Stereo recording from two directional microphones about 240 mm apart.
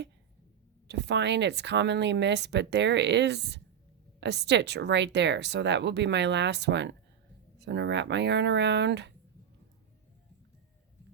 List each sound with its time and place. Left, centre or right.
0.9 s speech: right